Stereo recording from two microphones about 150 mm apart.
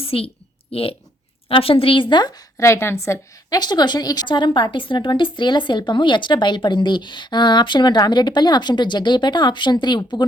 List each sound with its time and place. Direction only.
0.0 s a woman's voice: 40° left (ahead or behind)